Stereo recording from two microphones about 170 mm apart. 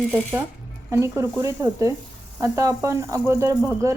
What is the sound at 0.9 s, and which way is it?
A woman's voice, 15° right (ahead or behind).